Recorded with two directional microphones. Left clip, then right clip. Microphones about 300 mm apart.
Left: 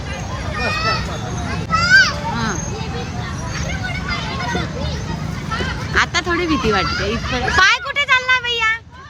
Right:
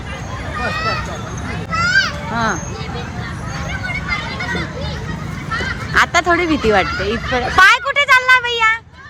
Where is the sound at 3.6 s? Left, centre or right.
Centre.